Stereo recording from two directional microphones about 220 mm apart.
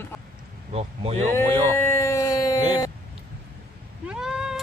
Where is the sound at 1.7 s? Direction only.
10° left (ahead or behind).